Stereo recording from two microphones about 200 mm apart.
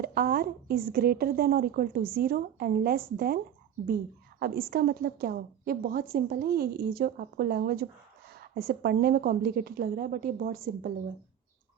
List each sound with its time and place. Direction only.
0.0 s a woman's voice: 50° right (ahead or behind)